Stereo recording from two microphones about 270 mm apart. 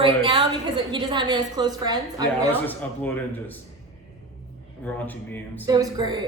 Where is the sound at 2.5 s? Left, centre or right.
Centre.